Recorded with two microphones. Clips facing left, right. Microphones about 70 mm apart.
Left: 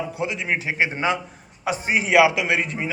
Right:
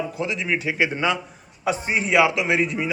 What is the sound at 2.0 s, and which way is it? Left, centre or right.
Speech, left.